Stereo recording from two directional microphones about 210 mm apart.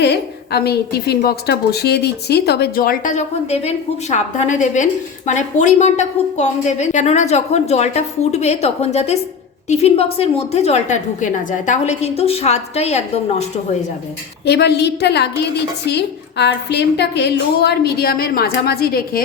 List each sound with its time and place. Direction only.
0.0 s a woman's voice: 50° left (ahead or behind); by 13.1 s 30° left (ahead or behind)
14.4 s a woman's voice: 55° left (ahead or behind)